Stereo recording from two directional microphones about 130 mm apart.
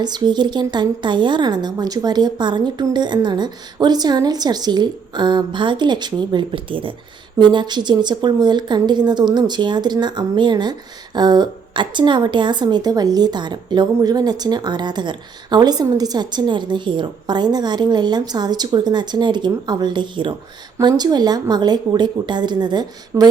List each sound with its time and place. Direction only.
0.0 s a woman's voice: 35° right (ahead or behind)